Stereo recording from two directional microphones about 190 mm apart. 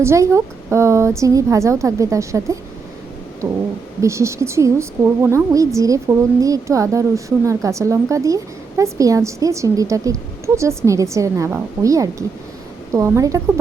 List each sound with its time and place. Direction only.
0.0 s a woman's voice: 15° right (ahead or behind)